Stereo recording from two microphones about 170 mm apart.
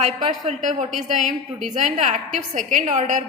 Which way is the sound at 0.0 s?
40° right (ahead or behind).